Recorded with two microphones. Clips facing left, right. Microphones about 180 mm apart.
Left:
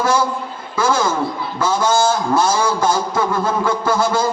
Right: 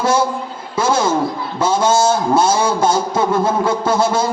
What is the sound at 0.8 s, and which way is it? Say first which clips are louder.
A woman's voice: right 2 dB; 25° right (ahead or behind).